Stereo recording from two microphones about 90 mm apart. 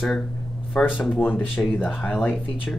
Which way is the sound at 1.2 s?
20° left (ahead or behind).